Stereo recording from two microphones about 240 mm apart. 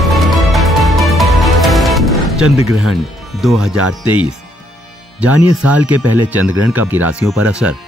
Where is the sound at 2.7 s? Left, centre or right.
Centre.